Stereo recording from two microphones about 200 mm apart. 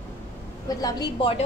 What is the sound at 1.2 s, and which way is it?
Speech, 25° left (ahead or behind).